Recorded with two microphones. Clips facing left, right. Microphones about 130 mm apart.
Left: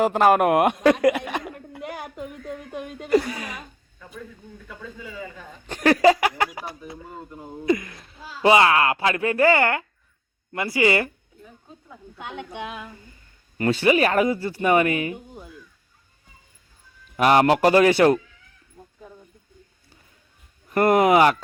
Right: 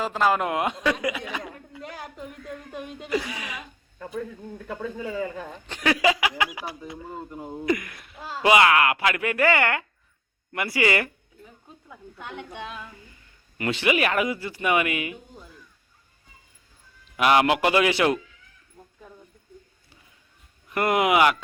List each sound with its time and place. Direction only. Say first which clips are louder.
0.0 s a woman's voice: left 6 dB; 60° left (ahead or behind)
1.8 s a sound: left 5 dB; 10° left (ahead or behind)
2.7 s speech: left 3 dB; centre (ahead or behind)
3.1 s a man's voice: left 8 dB; 45° left (ahead or behind)
4.5 s speech: right 8 dB; 60° right (ahead or behind)
5.6 s speech: left 6 dB; 45° left (ahead or behind)
6.9 s speech: right 2 dB; 20° right (ahead or behind)
7.6 s speech: left 4 dB; 25° left (ahead or behind)
12.1 s a sound: left 3 dB; 15° left (ahead or behind)
13.8 s a man's voice: left 4 dB; 35° left (ahead or behind)
17.2 s a man's voice: left 3 dB; 40° left (ahead or behind)
20.7 s a man's voice: left 5 dB; 40° left (ahead or behind)